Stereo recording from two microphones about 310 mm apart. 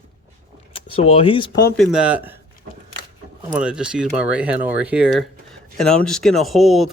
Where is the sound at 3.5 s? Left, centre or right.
Centre.